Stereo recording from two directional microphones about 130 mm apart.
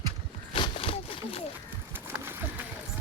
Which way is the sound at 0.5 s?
45° left (ahead or behind).